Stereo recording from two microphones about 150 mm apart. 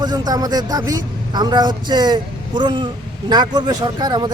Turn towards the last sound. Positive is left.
turn(degrees=-30)  # may be behind; listen again after turning